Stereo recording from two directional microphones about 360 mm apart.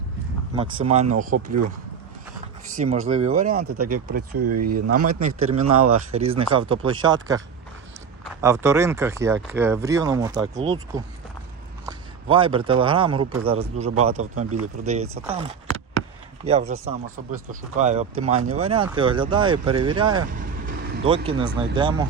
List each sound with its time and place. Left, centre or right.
0.5 s speech: centre
2.7 s speech: centre
3.7 s speech: right
6.1 s speech: centre
18.3 s speech: right
18.5 s speech: centre
20.3 s vehicle: right
21.2 s speech: centre